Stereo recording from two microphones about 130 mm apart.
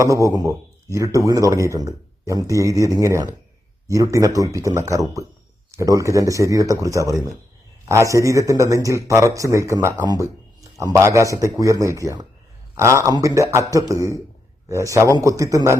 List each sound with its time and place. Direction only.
0.0 s speech: 25° right (ahead or behind)